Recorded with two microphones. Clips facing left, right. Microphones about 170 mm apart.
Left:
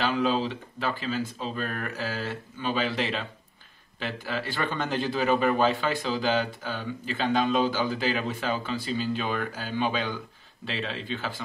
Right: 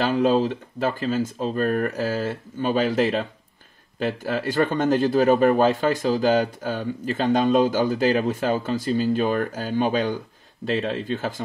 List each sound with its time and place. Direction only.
0.0 s a man's voice: 45° right (ahead or behind)